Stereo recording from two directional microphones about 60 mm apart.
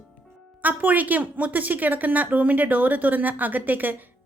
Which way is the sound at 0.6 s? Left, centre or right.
Right.